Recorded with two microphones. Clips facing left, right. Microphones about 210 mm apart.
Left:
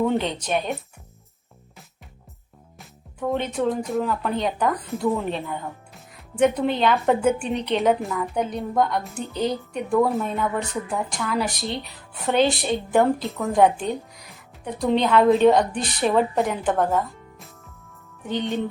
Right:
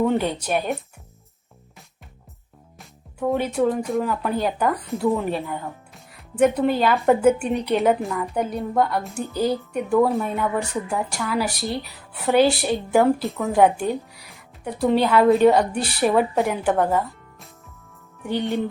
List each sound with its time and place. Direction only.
0.0 s speech: 5° right (ahead or behind)
2.7 s speech: 5° right (ahead or behind)
18.3 s speech: 10° right (ahead or behind)